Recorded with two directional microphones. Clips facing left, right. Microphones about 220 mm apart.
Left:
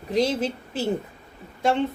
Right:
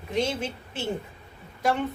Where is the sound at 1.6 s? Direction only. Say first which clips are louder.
Left 3 dB; 25° left (ahead or behind).